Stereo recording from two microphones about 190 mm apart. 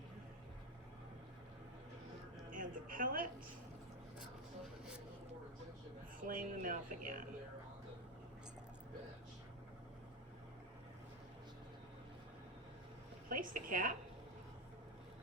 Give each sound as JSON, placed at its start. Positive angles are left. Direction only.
{"t": 2.5, "sound": "music", "side_deg": -45}
{"t": 6.2, "sound": "speech", "side_deg": -45}
{"t": 13.2, "sound": "a sound", "side_deg": -45}